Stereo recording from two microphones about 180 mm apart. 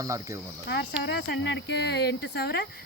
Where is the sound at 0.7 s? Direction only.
70° left (ahead or behind).